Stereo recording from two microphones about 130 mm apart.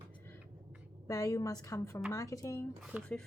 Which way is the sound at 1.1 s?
25° left (ahead or behind).